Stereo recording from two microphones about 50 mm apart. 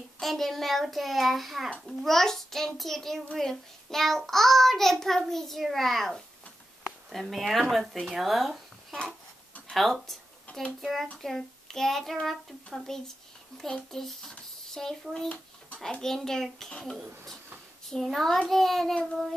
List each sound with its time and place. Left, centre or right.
0.2 s child singing: centre
6.8 s a sound: centre
7.7 s child singing: centre
9.7 s a sound: centre
10.8 s child singing: centre
12.7 s a child's voice: centre
15.2 s a sound: left
15.8 s a child's voice: centre
18.0 s child singing: centre